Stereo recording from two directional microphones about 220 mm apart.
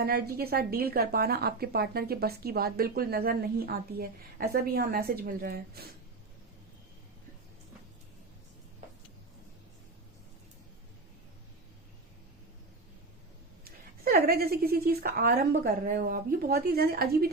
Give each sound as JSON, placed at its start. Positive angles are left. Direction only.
{"t": 0.0, "sound": "a woman's voice", "side_deg": -45}
{"t": 14.0, "sound": "a woman's voice", "side_deg": -45}